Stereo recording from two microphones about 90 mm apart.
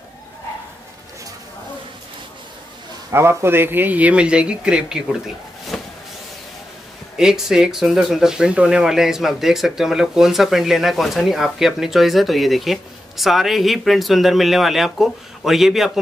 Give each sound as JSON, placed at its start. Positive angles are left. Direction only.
{"t": 3.1, "sound": "speech", "side_deg": -30}
{"t": 5.7, "sound": "vehicle", "side_deg": 5}
{"t": 7.2, "sound": "speech", "side_deg": -5}